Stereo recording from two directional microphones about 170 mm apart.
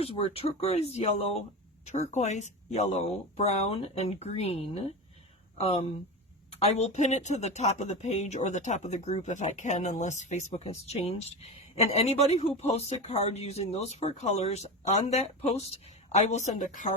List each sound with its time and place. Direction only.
0.0 s speech: 35° left (ahead or behind)